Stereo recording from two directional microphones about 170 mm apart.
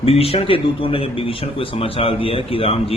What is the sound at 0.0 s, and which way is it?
Speech, 35° left (ahead or behind).